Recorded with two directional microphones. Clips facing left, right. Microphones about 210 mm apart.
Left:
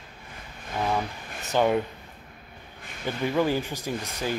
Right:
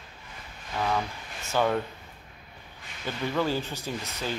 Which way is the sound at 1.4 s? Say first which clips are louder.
Left 3 dB; 15° left (ahead or behind).